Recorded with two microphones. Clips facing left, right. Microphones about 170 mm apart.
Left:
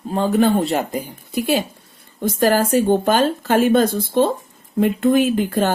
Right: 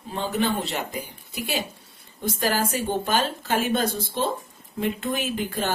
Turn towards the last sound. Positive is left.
turn(degrees=50)  # may be behind; listen again after turning